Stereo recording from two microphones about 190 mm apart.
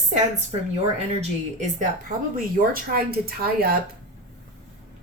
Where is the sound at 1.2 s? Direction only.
40° right (ahead or behind).